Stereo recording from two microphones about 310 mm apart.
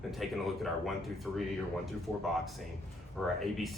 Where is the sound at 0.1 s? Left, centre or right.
Centre.